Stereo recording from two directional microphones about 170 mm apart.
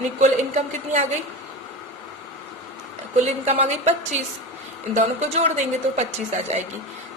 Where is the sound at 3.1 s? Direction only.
40° right (ahead or behind).